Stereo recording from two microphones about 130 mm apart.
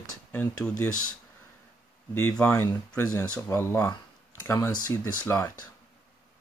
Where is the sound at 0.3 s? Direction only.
15° left (ahead or behind).